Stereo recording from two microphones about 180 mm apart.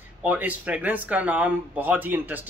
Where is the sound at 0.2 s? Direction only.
10° right (ahead or behind).